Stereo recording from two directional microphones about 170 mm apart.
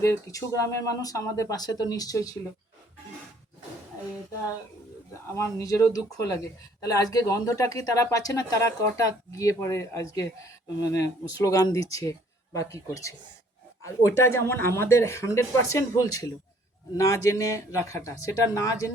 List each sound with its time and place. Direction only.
0.0 s speech: 20° left (ahead or behind)
5.1 s speech: 15° left (ahead or behind)